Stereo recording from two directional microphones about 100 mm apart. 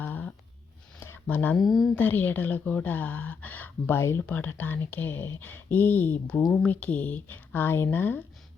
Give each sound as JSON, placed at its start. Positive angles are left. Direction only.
{"t": 0.0, "sound": "a sound", "side_deg": 15}
{"t": 1.5, "sound": "a woman's voice", "side_deg": 0}
{"t": 2.0, "sound": "a woman's voice", "side_deg": 20}